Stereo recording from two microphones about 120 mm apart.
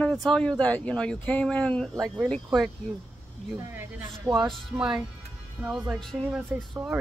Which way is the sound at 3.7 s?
15° right (ahead or behind).